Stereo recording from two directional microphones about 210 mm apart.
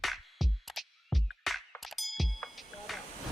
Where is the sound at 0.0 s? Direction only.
Centre (ahead or behind).